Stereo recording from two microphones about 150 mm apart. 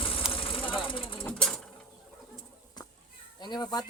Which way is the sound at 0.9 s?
35° left (ahead or behind).